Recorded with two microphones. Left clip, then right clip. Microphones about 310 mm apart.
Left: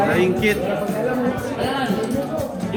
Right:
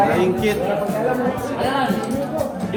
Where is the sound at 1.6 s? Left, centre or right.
Centre.